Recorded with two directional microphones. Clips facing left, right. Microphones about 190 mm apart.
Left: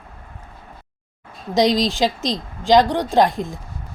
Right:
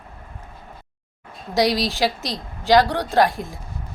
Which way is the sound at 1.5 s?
20° left (ahead or behind).